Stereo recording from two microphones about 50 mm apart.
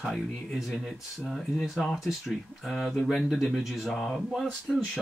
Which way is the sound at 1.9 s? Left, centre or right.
Centre.